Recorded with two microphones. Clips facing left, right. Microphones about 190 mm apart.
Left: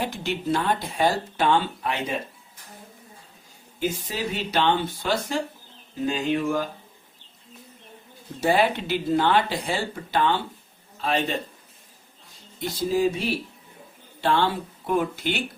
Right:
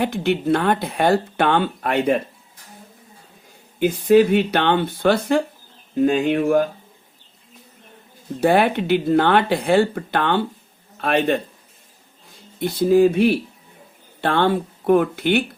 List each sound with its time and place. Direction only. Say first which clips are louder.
0.0 s speech: right 8 dB; 60° right (ahead or behind)
3.8 s speech: right 14 dB; 60° right (ahead or behind)
8.4 s a man's voice: right 5 dB; 55° right (ahead or behind)
12.5 s speech: right 9 dB; 60° right (ahead or behind)